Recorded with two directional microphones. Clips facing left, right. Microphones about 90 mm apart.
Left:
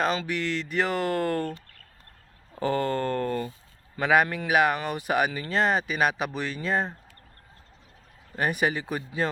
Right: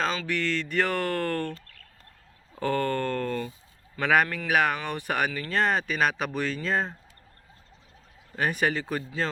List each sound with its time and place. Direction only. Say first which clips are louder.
0.3 s speech: right 1 dB; 10° left (ahead or behind)
8.4 s speech: even; 10° left (ahead or behind)